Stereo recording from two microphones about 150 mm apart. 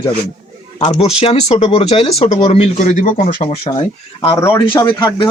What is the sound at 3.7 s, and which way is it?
Speech, 35° left (ahead or behind).